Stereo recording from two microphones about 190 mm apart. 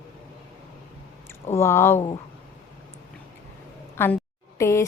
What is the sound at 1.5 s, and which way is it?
Speech, 15° left (ahead or behind).